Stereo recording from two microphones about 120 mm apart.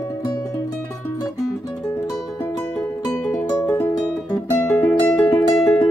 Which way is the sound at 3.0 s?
30° left (ahead or behind).